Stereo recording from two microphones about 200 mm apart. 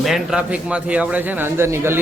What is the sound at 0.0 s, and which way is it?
Speech, centre (ahead or behind).